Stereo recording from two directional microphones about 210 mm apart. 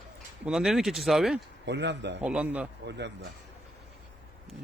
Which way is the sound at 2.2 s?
5° right (ahead or behind).